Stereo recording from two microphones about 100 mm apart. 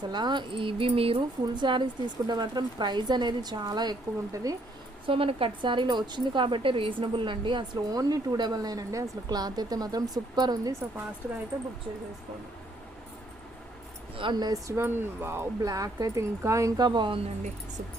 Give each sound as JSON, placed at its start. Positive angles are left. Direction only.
{"t": 0.0, "sound": "speech", "side_deg": -45}
{"t": 1.5, "sound": "a woman's voice", "side_deg": -50}
{"t": 5.0, "sound": "a woman's voice", "side_deg": -65}
{"t": 14.2, "sound": "a woman's voice", "side_deg": -50}
{"t": 14.7, "sound": "speech", "side_deg": -25}